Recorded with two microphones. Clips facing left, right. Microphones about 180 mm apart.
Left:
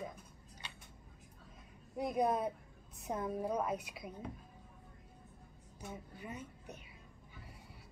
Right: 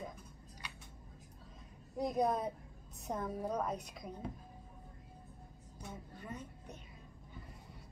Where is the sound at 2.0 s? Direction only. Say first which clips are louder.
Even; 5° left (ahead or behind).